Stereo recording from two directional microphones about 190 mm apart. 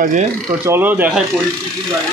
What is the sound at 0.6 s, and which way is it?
Speech, 10° right (ahead or behind).